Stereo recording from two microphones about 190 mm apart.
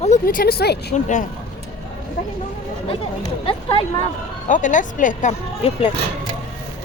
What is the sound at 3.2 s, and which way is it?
Speech, 30° left (ahead or behind).